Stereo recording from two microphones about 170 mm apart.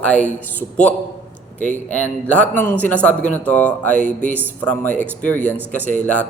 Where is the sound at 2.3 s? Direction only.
10° left (ahead or behind).